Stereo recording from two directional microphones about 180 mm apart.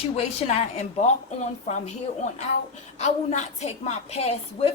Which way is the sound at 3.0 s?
40° left (ahead or behind).